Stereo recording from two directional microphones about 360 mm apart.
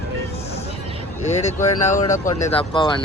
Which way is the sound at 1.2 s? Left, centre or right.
Centre.